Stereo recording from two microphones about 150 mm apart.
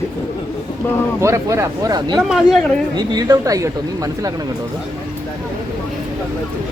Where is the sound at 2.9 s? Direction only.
25° right (ahead or behind).